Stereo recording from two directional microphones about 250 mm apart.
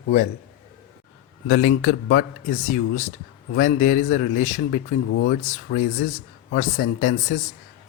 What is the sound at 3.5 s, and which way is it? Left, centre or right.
Speech, left.